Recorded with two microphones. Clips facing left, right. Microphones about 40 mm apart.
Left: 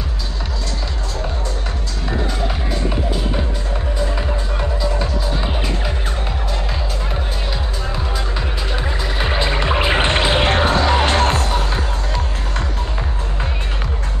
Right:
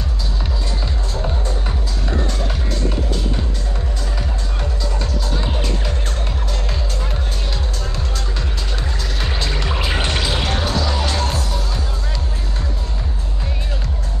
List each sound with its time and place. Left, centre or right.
4.0 s music: centre
7.9 s music: centre; by 12.6 s left